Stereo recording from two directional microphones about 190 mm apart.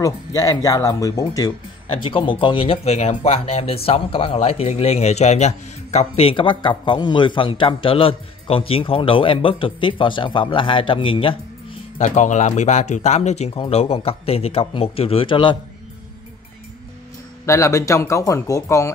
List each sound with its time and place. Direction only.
0.0 s speech: 20° left (ahead or behind)
12.0 s a man's voice: 40° left (ahead or behind)
17.5 s speech: 15° left (ahead or behind)